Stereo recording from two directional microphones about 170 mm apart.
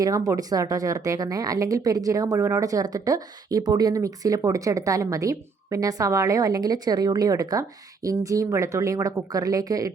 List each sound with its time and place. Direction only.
0.0 s speech: 20° right (ahead or behind)